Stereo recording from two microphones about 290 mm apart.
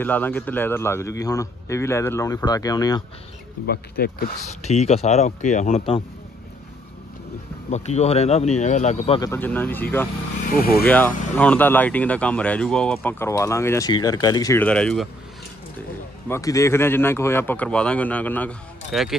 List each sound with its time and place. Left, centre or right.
0.0 s a man's voice: centre
3.6 s speech: left
7.7 s speech: left
9.3 s a man's voice: centre
10.5 s speech: left
10.9 s speech: centre
16.3 s a man's voice: centre